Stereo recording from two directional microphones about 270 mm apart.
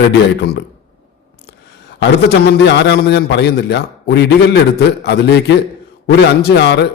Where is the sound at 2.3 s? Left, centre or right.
Left.